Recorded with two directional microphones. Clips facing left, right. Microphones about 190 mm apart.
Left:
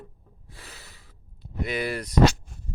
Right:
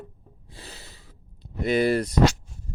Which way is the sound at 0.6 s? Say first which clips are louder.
Right 4 dB; 35° right (ahead or behind).